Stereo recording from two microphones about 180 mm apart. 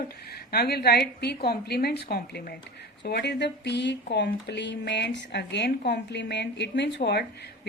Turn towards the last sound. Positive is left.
turn(degrees=70)  # may be behind; listen again after turning